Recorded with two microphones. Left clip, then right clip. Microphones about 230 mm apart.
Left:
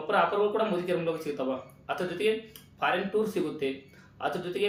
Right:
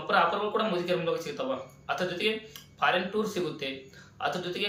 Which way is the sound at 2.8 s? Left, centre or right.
Centre.